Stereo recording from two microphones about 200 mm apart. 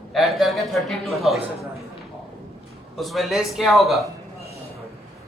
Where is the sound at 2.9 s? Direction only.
Centre (ahead or behind).